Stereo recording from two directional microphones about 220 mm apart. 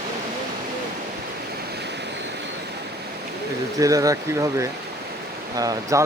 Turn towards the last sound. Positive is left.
turn(degrees=-15)  # may be behind; listen again after turning